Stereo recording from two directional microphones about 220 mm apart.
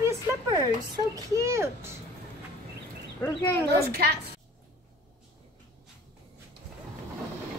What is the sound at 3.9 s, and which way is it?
Speech, 45° right (ahead or behind).